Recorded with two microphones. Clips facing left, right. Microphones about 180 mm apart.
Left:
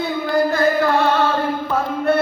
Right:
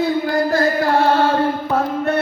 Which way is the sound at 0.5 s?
35° right (ahead or behind).